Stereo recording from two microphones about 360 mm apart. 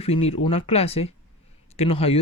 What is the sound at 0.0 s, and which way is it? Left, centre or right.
Speech, centre.